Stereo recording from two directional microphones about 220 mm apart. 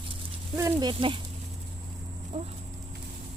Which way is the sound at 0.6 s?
15° right (ahead or behind).